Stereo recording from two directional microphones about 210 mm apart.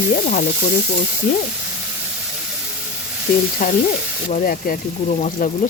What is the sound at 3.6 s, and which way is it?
Stir, 40° left (ahead or behind).